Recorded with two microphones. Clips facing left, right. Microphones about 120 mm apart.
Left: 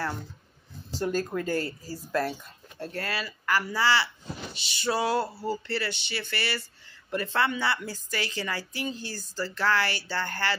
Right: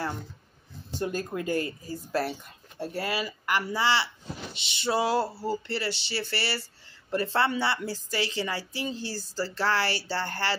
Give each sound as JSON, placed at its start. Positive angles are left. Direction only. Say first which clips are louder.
{"t": 0.9, "sound": "a woman's voice", "louder": "left 2 dB", "side_deg": -20}